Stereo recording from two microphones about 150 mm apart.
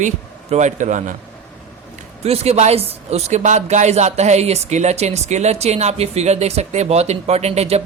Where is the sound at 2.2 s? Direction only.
45° right (ahead or behind).